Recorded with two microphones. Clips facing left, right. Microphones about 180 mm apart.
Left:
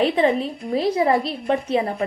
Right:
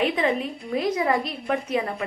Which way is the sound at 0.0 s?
30° left (ahead or behind).